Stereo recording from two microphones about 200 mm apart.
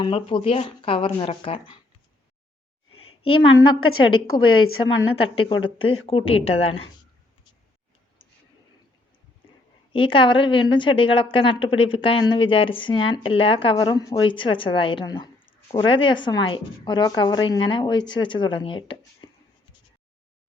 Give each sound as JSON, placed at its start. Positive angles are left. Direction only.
{"t": 0.0, "sound": "a woman's voice", "side_deg": 25}
{"t": 3.3, "sound": "a woman's voice", "side_deg": 90}
{"t": 5.3, "sound": "a woman's voice", "side_deg": 25}
{"t": 9.9, "sound": "a woman's voice", "side_deg": 25}